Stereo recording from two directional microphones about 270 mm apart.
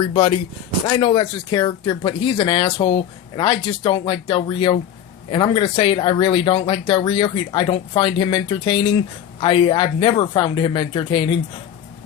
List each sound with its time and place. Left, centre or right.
0.0 s speech: centre